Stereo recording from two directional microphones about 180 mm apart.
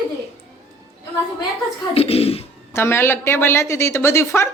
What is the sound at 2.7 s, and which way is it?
Speech, 15° left (ahead or behind).